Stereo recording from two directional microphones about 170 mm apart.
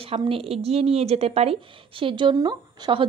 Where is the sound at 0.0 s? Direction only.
35° right (ahead or behind).